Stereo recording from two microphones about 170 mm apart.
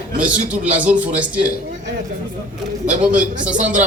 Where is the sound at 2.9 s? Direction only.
50° right (ahead or behind).